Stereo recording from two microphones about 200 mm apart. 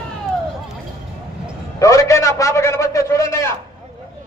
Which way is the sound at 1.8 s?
15° left (ahead or behind).